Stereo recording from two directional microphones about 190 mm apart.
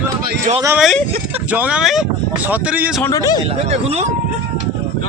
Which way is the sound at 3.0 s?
15° left (ahead or behind).